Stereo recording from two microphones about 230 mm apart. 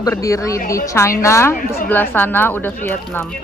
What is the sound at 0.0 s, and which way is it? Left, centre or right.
Speech, centre.